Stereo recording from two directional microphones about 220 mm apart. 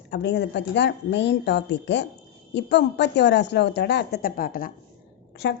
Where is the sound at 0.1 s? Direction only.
50° left (ahead or behind).